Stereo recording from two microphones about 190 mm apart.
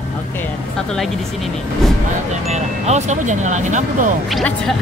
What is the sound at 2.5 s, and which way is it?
Speech, 40° right (ahead or behind).